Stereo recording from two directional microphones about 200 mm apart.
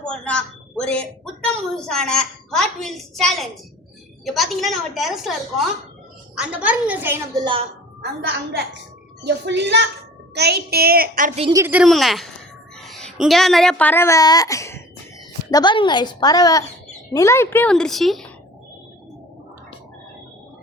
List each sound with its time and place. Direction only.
0.1 s a sound: 5° left (ahead or behind)
1.7 s a woman's voice: 5° left (ahead or behind)
8.0 s a woman's voice: 55° right (ahead or behind)
11.5 s a woman's voice: 10° right (ahead or behind)